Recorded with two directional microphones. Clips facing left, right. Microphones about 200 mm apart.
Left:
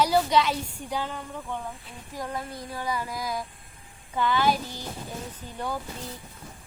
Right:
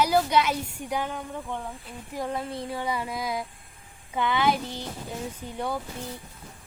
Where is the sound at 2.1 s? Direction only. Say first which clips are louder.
Right 3 dB; 25° right (ahead or behind).